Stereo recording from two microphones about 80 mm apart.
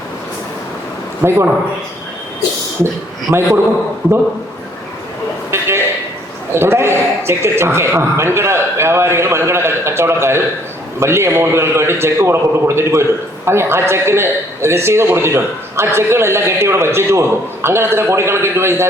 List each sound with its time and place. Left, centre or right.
1.2 s a man's voice: right
3.3 s a man's voice: right
5.5 s a sound: right
6.5 s a man's voice: right